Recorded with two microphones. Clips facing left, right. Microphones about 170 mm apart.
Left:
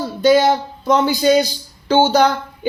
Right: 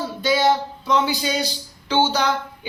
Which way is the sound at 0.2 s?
50° left (ahead or behind).